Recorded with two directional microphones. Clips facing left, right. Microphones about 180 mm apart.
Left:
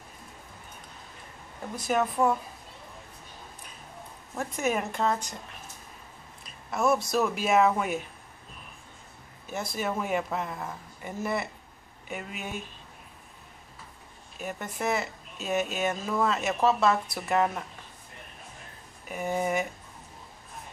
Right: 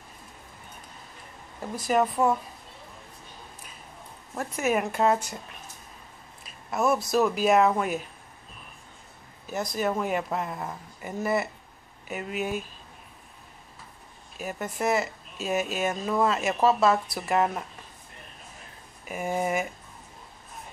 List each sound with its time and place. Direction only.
1.8 s speech: centre (ahead or behind)
4.4 s speech: centre (ahead or behind)
6.4 s a sound: 5° right (ahead or behind)
7.1 s speech: centre (ahead or behind)
9.5 s speech: centre (ahead or behind)
14.4 s speech: 5° right (ahead or behind)
19.0 s speech: 5° right (ahead or behind)